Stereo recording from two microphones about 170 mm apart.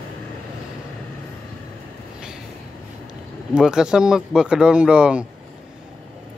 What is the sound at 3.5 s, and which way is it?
Speech, 5° right (ahead or behind).